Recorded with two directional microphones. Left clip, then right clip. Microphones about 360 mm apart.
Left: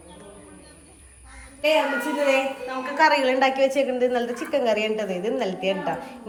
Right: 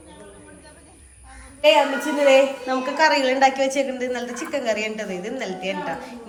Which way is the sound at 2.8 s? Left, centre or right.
Centre.